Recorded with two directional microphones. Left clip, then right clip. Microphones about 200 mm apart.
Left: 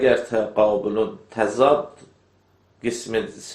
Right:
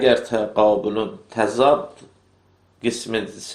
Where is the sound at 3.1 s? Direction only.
30° right (ahead or behind).